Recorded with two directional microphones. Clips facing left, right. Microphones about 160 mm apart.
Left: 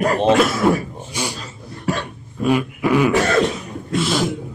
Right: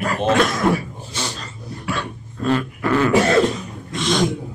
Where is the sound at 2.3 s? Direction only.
10° left (ahead or behind).